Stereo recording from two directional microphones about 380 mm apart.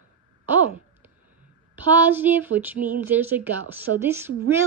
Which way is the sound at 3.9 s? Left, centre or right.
Right.